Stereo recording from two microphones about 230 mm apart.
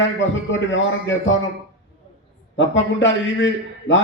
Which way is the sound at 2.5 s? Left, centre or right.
Left.